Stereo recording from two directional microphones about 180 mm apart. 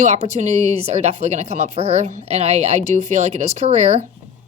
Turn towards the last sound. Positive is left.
turn(degrees=-40)  # may be behind; listen again after turning